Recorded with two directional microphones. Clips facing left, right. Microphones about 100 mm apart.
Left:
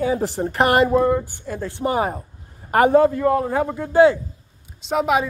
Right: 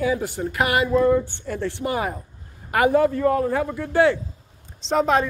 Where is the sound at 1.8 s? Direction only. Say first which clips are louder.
Left 7 dB; 30° left (ahead or behind).